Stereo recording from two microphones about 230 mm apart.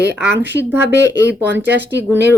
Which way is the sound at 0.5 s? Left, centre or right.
Centre.